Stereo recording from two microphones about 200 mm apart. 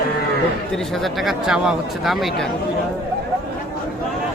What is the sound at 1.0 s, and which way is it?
Speech, centre (ahead or behind).